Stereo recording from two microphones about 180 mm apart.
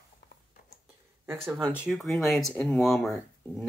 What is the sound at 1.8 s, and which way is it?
Speech, centre (ahead or behind).